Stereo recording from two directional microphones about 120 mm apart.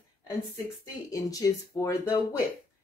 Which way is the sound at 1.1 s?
30° left (ahead or behind).